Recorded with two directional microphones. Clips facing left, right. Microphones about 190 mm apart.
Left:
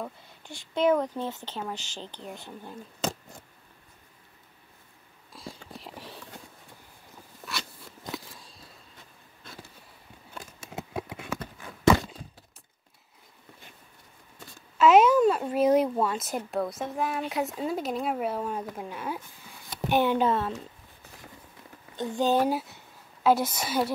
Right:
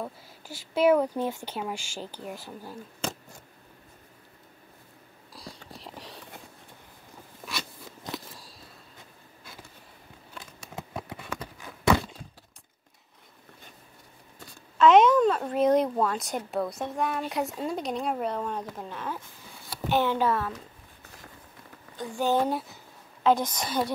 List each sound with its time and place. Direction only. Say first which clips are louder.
0.0 s speech: right 1 dB; 5° right (ahead or behind)
5.3 s clip-clop: left 2 dB; centre (ahead or behind)
8.1 s a sound: even; centre (ahead or behind)
14.8 s speech: even; 5° left (ahead or behind); by 20.5 s 25° left (ahead or behind)
21.9 s speech: left 1 dB; 20° left (ahead or behind)